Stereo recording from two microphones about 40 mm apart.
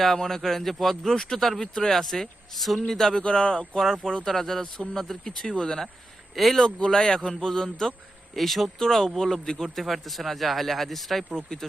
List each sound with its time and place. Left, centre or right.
0.0 s speech: centre
2.8 s speech: centre
3.2 s speech: left
4.3 s speech: centre
6.7 s speech: left
8.4 s speech: centre